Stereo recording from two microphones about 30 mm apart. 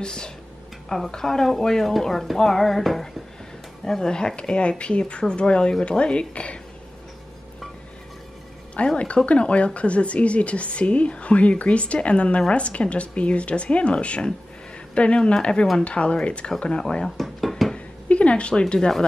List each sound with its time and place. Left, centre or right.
0.0 s speech: left
1.1 s music: centre
4.6 s speech: left
8.7 s a woman's voice: left
17.0 s dishes: centre
17.7 s a sound: left